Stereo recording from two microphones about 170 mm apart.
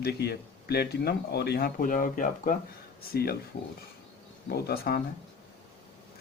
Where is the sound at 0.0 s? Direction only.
70° left (ahead or behind); by 2.6 s 50° left (ahead or behind).